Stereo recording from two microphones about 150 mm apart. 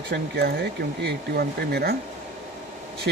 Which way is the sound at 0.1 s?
90° right.